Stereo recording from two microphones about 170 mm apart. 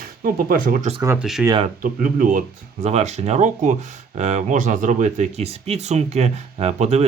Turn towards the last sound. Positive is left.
turn(degrees=-40)  # may be behind; listen again after turning